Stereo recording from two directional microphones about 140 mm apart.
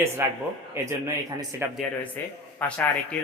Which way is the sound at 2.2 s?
15° left (ahead or behind).